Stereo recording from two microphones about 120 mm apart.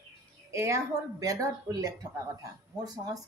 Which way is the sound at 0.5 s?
25° right (ahead or behind).